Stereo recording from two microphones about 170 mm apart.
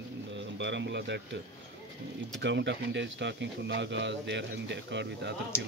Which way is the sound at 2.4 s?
90° right.